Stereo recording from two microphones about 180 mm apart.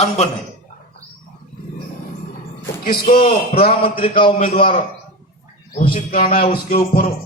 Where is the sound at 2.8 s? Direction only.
55° left (ahead or behind).